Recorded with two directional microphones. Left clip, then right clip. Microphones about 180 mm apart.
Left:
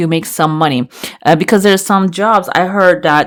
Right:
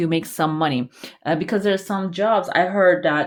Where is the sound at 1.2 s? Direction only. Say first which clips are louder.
Left 11 dB; 50° left (ahead or behind).